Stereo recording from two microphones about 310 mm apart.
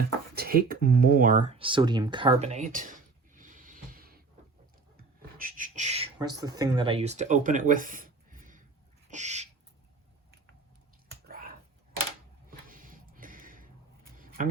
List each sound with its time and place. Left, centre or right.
0.3 s speech: right
9.0 s owl: right
11.3 s a sound: right